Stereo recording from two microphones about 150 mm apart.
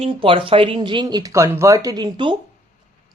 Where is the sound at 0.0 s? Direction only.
35° right (ahead or behind).